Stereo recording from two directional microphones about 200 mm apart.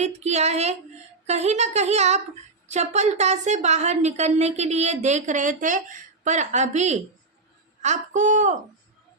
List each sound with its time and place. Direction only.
0.0 s a woman's voice: 35° right (ahead or behind)